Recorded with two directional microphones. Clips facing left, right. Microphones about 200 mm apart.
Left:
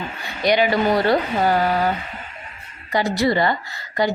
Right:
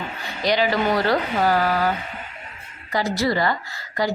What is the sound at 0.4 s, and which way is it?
Speech, 15° left (ahead or behind).